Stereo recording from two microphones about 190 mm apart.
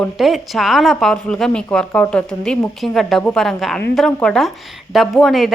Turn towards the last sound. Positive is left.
turn(degrees=0)  # may be behind; listen again after turning